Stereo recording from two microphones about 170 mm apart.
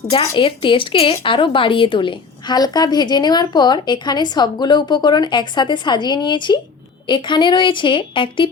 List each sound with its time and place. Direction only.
0.1 s a woman's voice: 30° left (ahead or behind)